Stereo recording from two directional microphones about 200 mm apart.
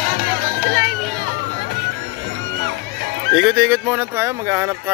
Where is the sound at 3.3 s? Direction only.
5° right (ahead or behind).